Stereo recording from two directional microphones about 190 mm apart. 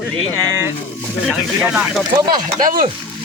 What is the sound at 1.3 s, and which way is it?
Speech, 5° right (ahead or behind).